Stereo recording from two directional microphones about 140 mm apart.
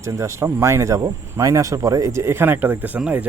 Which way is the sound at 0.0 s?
20° right (ahead or behind).